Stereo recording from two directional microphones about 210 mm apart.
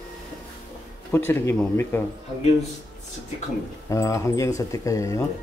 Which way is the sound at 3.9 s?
15° left (ahead or behind).